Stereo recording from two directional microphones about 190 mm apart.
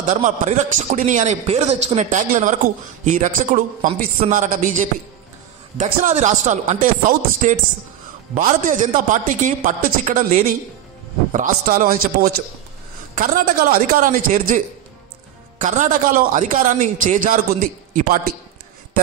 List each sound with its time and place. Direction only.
0.1 s a man's voice: 40° right (ahead or behind)
15.6 s a man's voice: 40° right (ahead or behind)